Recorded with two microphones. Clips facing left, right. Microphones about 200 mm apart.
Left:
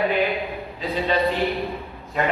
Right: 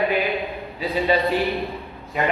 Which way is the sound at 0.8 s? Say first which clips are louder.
Right 3 dB; 15° right (ahead or behind).